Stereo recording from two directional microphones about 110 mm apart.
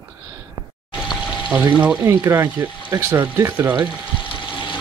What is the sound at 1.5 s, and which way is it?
Speech, 15° right (ahead or behind).